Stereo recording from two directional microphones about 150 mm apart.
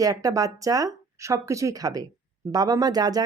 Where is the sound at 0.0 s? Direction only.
25° right (ahead or behind).